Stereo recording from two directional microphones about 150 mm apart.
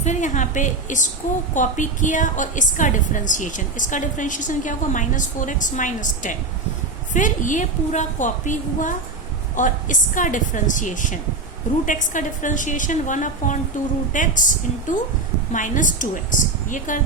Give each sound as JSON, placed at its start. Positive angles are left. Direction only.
{"t": 0.0, "sound": "a woman's voice", "side_deg": 55}